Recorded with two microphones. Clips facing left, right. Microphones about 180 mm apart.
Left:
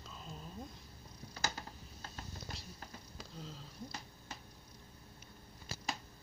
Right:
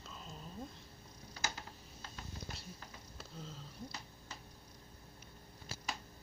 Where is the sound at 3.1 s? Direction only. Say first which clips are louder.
Right 1 dB; centre (ahead or behind).